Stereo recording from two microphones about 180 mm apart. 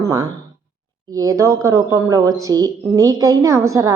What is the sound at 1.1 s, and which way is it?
A woman's voice, 20° right (ahead or behind).